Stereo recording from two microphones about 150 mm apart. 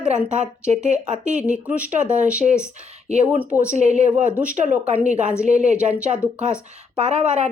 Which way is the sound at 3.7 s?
50° right (ahead or behind).